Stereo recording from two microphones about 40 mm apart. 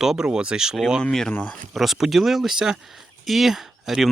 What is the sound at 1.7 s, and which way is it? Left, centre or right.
Speech, centre.